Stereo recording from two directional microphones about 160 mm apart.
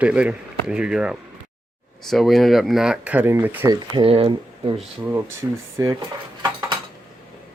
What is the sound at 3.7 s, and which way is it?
Speech, 30° right (ahead or behind).